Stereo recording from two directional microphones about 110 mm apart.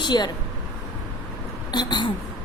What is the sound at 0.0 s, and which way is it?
Speech, 40° left (ahead or behind).